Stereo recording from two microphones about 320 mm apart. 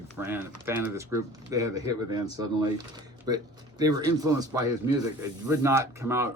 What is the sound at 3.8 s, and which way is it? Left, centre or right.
Speech, centre.